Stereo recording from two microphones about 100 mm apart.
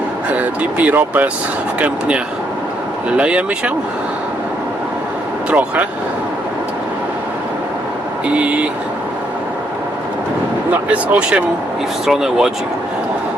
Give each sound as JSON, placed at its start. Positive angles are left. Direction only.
{"t": 0.3, "sound": "speech", "side_deg": -15}
{"t": 5.5, "sound": "speech", "side_deg": -15}
{"t": 8.3, "sound": "speech", "side_deg": -15}
{"t": 10.8, "sound": "speech", "side_deg": -15}